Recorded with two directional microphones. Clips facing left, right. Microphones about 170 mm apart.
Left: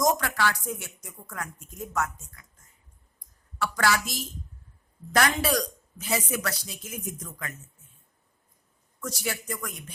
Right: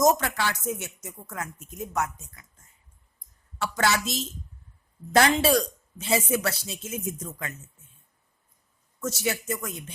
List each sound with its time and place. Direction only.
0.0 s speech: 25° right (ahead or behind)
3.2 s a sound: 25° right (ahead or behind)
5.1 s speech: 25° right (ahead or behind)
9.0 s speech: 25° right (ahead or behind)